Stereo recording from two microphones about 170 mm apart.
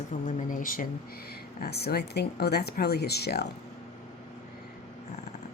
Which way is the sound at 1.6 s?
70° left (ahead or behind).